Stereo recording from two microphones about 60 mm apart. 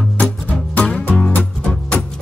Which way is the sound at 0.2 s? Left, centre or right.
Left.